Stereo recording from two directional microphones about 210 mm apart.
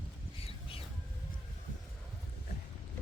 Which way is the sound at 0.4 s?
25° left (ahead or behind).